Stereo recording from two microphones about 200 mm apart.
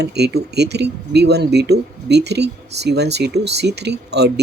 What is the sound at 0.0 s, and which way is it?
Speech, 55° right (ahead or behind).